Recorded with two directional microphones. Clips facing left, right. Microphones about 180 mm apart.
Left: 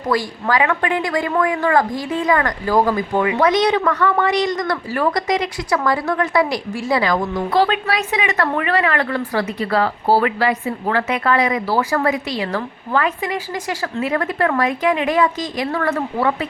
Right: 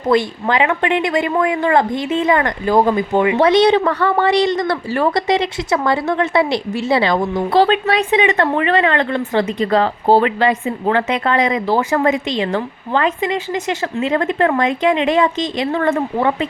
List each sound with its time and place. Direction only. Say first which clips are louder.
0.1 s a woman's voice: right 4 dB; 25° right (ahead or behind)